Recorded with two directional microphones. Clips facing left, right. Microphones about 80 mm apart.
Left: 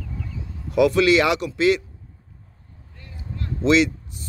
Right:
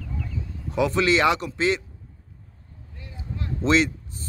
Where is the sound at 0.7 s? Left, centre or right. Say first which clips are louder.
Left 5 dB; right.